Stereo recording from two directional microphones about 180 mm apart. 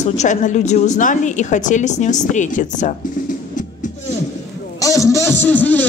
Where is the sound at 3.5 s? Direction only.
45° left (ahead or behind).